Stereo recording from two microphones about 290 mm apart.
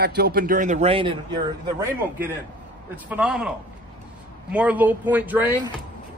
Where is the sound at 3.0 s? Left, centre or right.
Centre.